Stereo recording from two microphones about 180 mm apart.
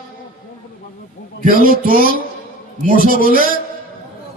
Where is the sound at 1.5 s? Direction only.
50° right (ahead or behind).